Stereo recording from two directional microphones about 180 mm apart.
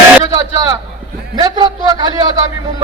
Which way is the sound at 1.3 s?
25° right (ahead or behind).